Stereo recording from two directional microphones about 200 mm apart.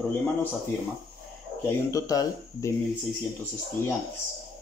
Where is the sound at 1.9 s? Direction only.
15° left (ahead or behind).